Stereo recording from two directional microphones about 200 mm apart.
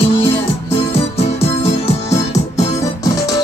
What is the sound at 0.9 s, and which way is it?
Music, 30° left (ahead or behind).